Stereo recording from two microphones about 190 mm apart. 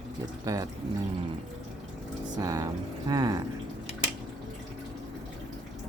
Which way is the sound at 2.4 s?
20° right (ahead or behind).